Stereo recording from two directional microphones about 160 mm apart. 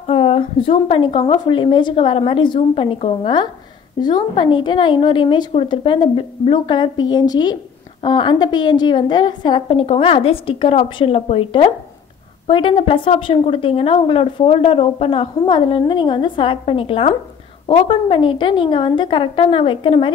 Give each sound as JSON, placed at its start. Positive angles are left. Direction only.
{"t": 0.0, "sound": "a woman's voice", "side_deg": 35}